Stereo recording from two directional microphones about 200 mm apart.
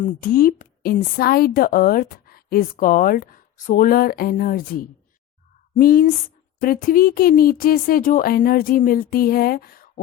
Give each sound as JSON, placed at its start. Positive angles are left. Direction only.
{"t": 0.0, "sound": "a woman's voice", "side_deg": 45}